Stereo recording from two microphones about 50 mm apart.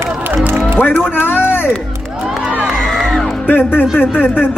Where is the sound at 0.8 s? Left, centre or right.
Left.